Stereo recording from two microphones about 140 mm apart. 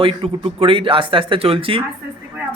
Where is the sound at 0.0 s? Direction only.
40° right (ahead or behind).